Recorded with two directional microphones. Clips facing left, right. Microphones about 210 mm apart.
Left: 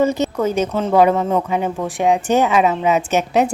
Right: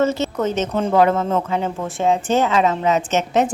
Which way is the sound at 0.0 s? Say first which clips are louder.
Left 2 dB; 15° left (ahead or behind).